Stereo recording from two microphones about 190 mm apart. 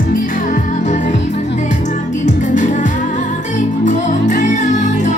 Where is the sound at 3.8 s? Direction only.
40° left (ahead or behind).